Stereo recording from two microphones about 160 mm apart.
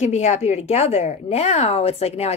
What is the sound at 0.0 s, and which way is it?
A woman's voice, 45° left (ahead or behind).